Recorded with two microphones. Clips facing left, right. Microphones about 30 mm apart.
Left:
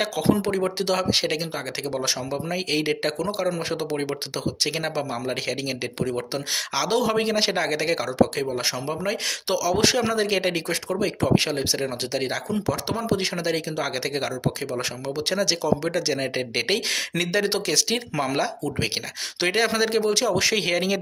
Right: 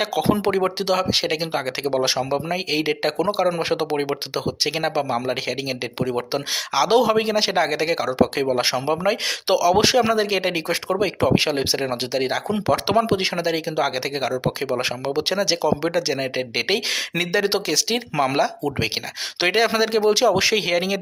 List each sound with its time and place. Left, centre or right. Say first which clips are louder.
0.0 s speech: right 2 dB; centre
1.4 s speech: right 5 dB; right
2.6 s speech: even; centre
7.1 s speech: right 3 dB; centre
8.4 s speech: right 6 dB; right; by 10.6 s centre
10.7 s speech: right 4 dB; right
12.5 s speech: right 5 dB; right
13.1 s speech: right 3 dB; right
13.4 s speech: right 4 dB; centre
14.6 s speech: right 5 dB; right
15.3 s speech: right 1 dB; centre
19.4 s speech: right 3 dB; centre
20.6 s speech: right 2 dB; centre